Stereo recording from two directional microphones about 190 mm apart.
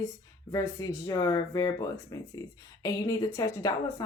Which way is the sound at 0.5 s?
15° left (ahead or behind).